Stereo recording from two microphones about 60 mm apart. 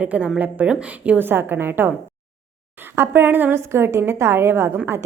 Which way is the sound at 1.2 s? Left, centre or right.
Right.